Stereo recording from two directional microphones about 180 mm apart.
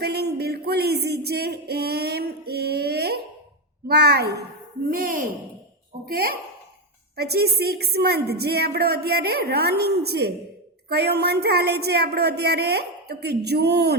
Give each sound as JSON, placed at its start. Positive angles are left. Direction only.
{"t": 0.0, "sound": "music", "side_deg": -65}
{"t": 4.9, "sound": "speech", "side_deg": -55}
{"t": 6.1, "sound": "music", "side_deg": -55}